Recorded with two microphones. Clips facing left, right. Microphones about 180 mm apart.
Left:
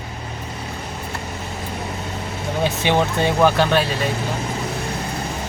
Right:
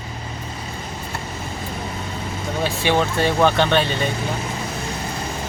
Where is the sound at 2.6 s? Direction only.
15° left (ahead or behind).